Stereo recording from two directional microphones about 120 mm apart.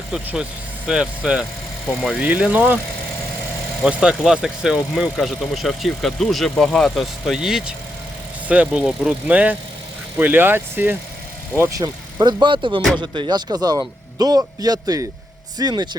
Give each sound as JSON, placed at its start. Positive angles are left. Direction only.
{"t": 0.1, "sound": "speech", "side_deg": -5}
{"t": 3.8, "sound": "speech", "side_deg": -5}
{"t": 12.2, "sound": "speech", "side_deg": -40}